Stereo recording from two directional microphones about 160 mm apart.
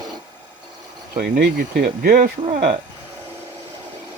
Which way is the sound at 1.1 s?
65° right (ahead or behind).